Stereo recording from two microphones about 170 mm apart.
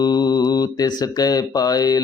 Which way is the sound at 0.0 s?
25° left (ahead or behind).